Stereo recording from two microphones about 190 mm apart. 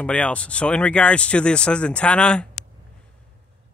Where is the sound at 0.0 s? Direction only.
5° left (ahead or behind).